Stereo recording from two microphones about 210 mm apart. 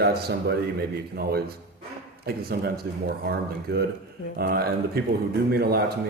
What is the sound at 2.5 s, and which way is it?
Speech, 50° right (ahead or behind).